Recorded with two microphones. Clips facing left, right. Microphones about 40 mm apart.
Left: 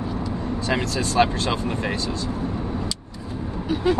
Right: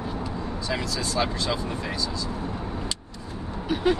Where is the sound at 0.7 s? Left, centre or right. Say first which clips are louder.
Left 5 dB; left.